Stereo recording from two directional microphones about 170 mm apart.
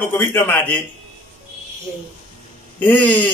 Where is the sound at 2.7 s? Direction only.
10° left (ahead or behind).